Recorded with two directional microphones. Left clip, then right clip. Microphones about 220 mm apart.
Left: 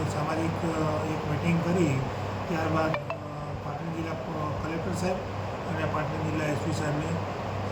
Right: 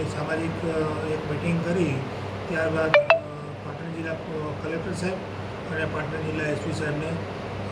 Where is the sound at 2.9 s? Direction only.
45° right (ahead or behind).